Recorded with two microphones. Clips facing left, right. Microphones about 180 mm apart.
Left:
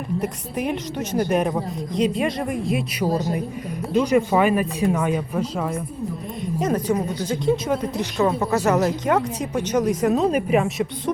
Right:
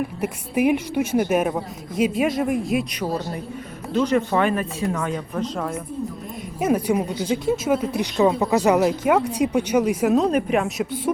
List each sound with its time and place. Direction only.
0.2 s a woman's voice: 10° right (ahead or behind)
3.9 s speech: 10° left (ahead or behind)
6.6 s speech: 10° right (ahead or behind)